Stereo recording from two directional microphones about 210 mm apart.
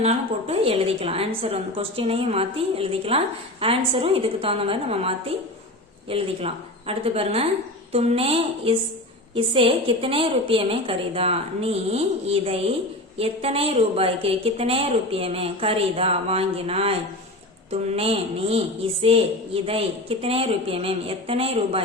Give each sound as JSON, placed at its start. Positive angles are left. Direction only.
{"t": 0.0, "sound": "a woman's voice", "side_deg": -30}